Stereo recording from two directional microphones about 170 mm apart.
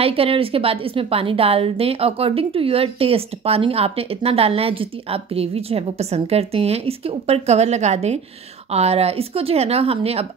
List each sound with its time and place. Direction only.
0.0 s a woman's voice: 35° right (ahead or behind)